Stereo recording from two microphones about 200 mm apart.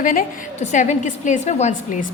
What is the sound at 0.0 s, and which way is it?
A woman's voice, 40° left (ahead or behind).